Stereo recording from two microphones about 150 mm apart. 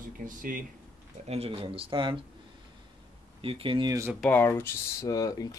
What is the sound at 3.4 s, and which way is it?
Speech, 35° right (ahead or behind).